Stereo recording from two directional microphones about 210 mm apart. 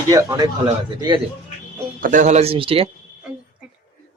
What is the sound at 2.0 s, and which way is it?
Speech, 35° right (ahead or behind).